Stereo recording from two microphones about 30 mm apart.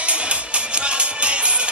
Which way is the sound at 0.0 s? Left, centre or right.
Right.